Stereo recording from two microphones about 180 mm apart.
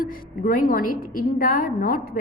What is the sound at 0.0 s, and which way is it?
A woman's voice, 50° left (ahead or behind).